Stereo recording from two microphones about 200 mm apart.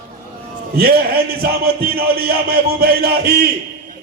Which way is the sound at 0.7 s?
50° right (ahead or behind).